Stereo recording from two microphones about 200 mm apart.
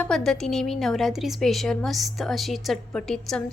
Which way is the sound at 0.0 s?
Centre (ahead or behind).